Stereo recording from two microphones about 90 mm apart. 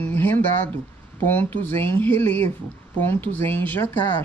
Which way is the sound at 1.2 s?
20° left (ahead or behind).